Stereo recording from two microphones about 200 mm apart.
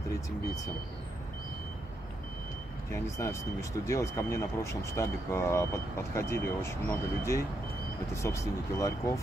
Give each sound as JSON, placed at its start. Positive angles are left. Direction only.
{"t": 2.9, "sound": "speech", "side_deg": 15}